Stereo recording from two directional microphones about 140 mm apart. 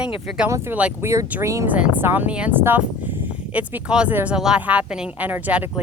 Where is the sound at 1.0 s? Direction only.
20° right (ahead or behind).